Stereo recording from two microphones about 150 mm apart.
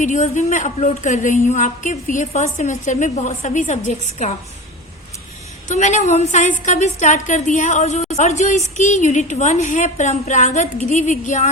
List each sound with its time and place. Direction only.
0.0 s a woman's voice: 55° left (ahead or behind)
5.6 s a woman's voice: 50° left (ahead or behind)